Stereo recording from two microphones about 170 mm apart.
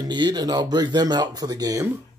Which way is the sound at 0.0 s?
25° right (ahead or behind).